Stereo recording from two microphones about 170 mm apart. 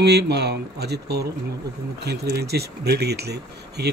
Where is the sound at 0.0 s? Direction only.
75° right (ahead or behind).